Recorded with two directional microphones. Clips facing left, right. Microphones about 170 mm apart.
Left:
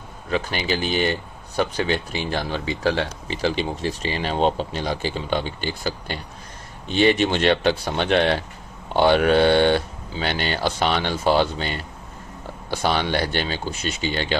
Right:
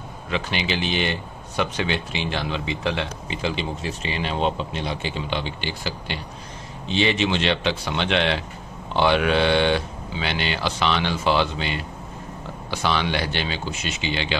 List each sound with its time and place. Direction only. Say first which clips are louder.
0.3 s speech: left 2 dB; 40° left (ahead or behind)